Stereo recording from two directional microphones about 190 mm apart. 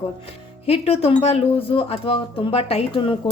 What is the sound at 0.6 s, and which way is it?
Speech, 30° left (ahead or behind).